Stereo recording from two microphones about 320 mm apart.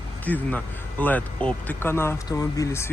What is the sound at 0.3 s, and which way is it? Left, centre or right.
Speech, centre.